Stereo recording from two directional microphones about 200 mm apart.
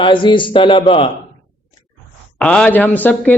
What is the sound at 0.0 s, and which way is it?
Speech, 25° left (ahead or behind).